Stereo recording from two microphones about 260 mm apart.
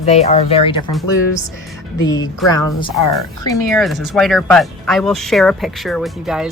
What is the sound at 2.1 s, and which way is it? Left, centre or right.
Speech, centre.